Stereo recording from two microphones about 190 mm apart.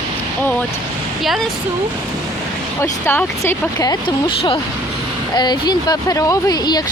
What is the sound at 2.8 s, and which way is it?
Speech, 10° left (ahead or behind).